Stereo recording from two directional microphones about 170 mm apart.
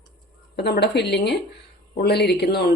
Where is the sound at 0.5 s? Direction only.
75° left (ahead or behind).